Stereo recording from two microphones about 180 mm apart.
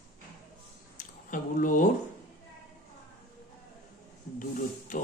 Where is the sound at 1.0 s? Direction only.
45° left (ahead or behind).